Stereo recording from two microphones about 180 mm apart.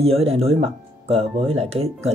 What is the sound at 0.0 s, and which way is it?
Speech, 35° right (ahead or behind).